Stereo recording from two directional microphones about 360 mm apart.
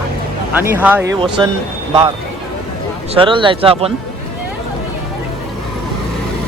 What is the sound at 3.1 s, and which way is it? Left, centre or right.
Speech, centre.